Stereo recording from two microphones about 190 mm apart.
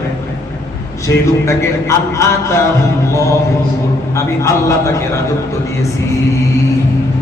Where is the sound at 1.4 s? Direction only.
15° left (ahead or behind).